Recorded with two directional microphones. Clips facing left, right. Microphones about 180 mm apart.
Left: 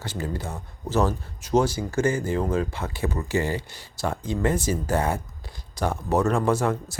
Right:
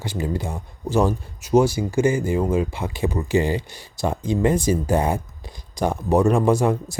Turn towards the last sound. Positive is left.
turn(degrees=-15)  # may be behind; listen again after turning